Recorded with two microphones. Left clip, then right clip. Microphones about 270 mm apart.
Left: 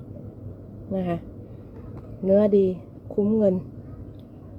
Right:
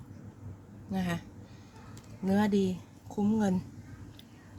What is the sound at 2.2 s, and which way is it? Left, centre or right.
Speech, right.